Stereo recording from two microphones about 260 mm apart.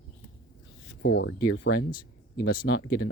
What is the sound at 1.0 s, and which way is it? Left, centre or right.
Speech, left.